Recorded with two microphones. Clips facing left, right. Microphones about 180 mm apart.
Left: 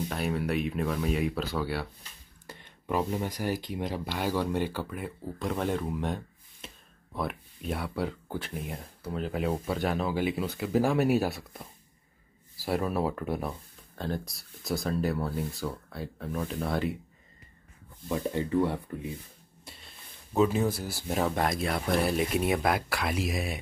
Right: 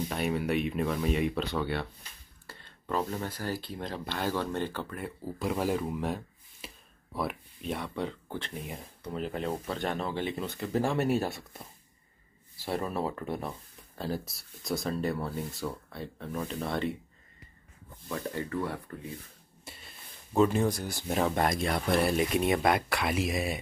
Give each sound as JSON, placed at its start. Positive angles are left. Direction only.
{"t": 0.1, "sound": "speech", "side_deg": 0}
{"t": 2.4, "sound": "speech", "side_deg": 15}
{"t": 12.6, "sound": "speech", "side_deg": 5}
{"t": 18.0, "sound": "speech", "side_deg": 20}
{"t": 19.6, "sound": "a sound", "side_deg": 0}
{"t": 20.3, "sound": "speech", "side_deg": 5}